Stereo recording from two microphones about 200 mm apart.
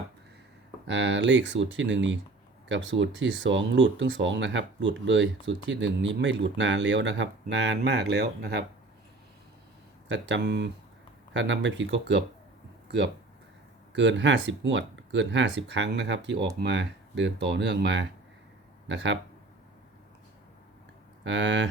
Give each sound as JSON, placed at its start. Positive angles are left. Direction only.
{"t": 0.9, "sound": "speech", "side_deg": -65}
{"t": 10.1, "sound": "speech", "side_deg": -65}
{"t": 13.9, "sound": "speech", "side_deg": -65}
{"t": 21.2, "sound": "speech", "side_deg": -65}